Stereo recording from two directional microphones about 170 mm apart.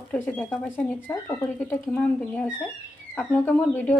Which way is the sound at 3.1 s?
10° left (ahead or behind).